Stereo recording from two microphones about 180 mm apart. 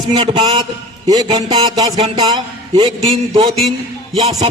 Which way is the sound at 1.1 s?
20° right (ahead or behind).